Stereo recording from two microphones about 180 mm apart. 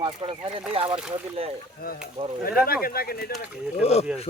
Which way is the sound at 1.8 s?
50° left (ahead or behind).